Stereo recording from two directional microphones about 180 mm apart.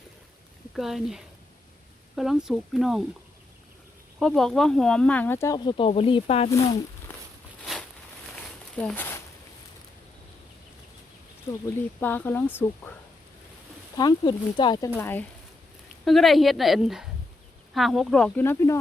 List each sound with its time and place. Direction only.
0.8 s speech: centre (ahead or behind)
4.2 s speech: centre (ahead or behind); by 6.5 s 35° left (ahead or behind)
7.6 s a sound: centre (ahead or behind)
11.6 s speech: 10° left (ahead or behind)
13.9 s speech: 20° left (ahead or behind)
14.9 s speech: 10° left (ahead or behind)
16.0 s speech: centre (ahead or behind)